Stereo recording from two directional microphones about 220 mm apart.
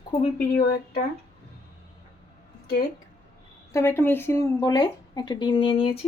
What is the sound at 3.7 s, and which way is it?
Speech, 10° left (ahead or behind).